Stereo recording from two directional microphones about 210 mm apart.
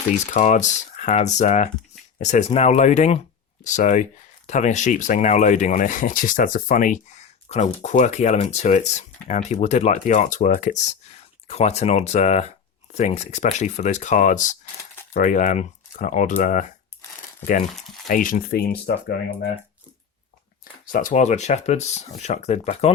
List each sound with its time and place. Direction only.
0.3 s speech: 35° left (ahead or behind)
17.7 s speech: centre (ahead or behind)
18.1 s speech: 40° left (ahead or behind)
20.8 s speech: 40° left (ahead or behind)